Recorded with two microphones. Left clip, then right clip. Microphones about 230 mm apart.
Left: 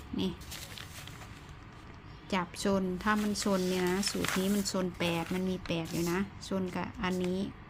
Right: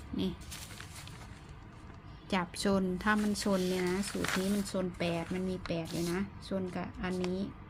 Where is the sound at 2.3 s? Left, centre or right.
Centre.